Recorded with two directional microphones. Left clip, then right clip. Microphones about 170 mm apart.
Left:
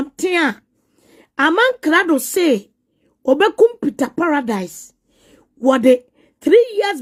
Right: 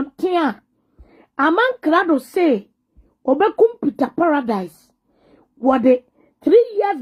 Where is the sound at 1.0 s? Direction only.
25° left (ahead or behind).